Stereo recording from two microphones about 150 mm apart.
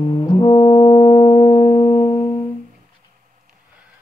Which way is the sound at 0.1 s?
35° left (ahead or behind).